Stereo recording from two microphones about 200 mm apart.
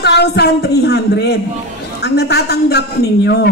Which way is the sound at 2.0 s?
55° left (ahead or behind).